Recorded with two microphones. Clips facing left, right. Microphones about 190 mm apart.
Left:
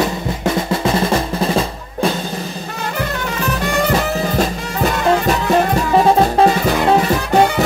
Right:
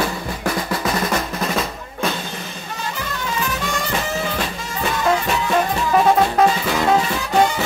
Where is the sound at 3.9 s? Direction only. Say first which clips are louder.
Left 6 dB; 40° left (ahead or behind).